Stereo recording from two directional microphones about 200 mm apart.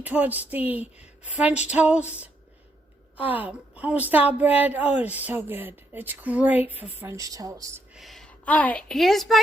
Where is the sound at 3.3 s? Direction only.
10° right (ahead or behind).